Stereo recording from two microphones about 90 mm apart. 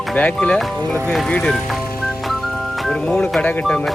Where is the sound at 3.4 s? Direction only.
15° left (ahead or behind).